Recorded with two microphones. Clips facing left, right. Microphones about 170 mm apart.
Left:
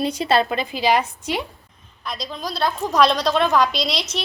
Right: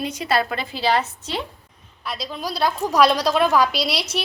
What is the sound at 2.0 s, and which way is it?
A woman's voice, 5° right (ahead or behind).